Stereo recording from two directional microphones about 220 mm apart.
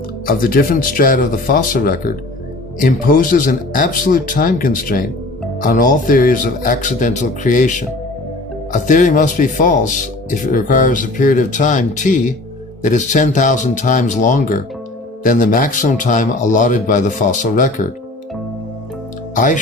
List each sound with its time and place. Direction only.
0.3 s speech: 40° left (ahead or behind)
19.3 s speech: 35° left (ahead or behind)